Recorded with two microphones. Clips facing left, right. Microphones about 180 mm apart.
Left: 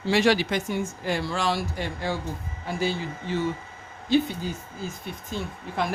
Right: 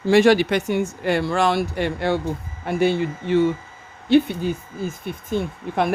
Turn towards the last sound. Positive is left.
turn(degrees=-55)  # may be behind; listen again after turning